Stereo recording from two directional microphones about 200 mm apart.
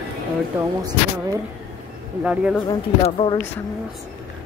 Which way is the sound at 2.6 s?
25° left (ahead or behind).